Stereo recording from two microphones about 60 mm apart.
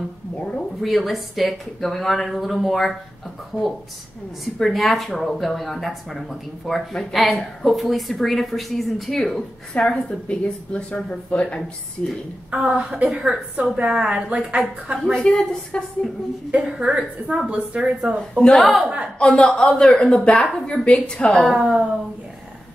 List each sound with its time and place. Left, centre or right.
0.4 s a sound: centre
0.8 s speech: centre
4.6 s speech: centre
12.4 s a woman's voice: centre
15.1 s speech: centre
16.5 s a woman's voice: centre
18.6 s speech: centre
19.1 s speech: centre
21.5 s a woman's voice: centre